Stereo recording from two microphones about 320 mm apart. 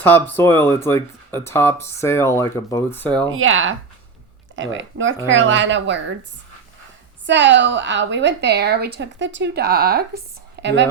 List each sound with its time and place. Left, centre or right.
0.0 s speech: centre
3.2 s a woman's voice: right
7.3 s a woman's voice: right